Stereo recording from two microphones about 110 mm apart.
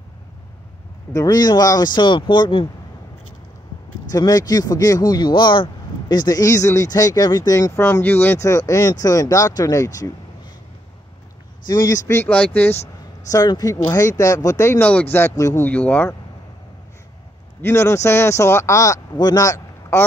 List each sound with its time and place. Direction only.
1.1 s speech: 35° left (ahead or behind)
4.1 s speech: 35° left (ahead or behind)
7.8 s speech: 20° left (ahead or behind)
11.6 s speech: 35° left (ahead or behind)
12.3 s speech: 10° left (ahead or behind)
13.3 s speech: 35° left (ahead or behind)
14.8 s speech: 15° left (ahead or behind)
15.6 s speech: 15° left (ahead or behind)
17.6 s speech: 25° left (ahead or behind)